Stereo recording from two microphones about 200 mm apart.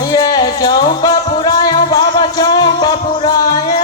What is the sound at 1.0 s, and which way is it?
Music, 20° left (ahead or behind).